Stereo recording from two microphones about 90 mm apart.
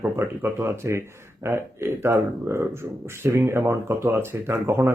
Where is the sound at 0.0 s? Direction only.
25° right (ahead or behind).